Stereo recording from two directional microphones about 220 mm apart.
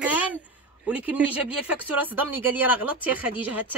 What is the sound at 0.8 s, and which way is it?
Speech, 5° right (ahead or behind).